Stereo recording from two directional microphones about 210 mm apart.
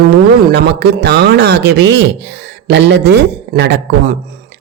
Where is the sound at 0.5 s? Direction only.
55° right (ahead or behind).